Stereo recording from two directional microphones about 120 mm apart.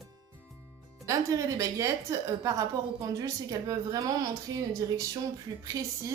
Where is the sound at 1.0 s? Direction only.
30° right (ahead or behind).